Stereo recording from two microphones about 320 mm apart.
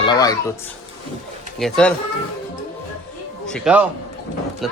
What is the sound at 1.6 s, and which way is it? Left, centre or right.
Speech, centre.